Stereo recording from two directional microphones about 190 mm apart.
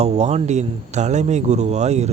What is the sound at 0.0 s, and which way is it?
Speech, 35° right (ahead or behind).